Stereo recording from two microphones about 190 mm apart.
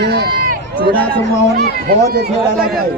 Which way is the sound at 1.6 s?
55° right (ahead or behind).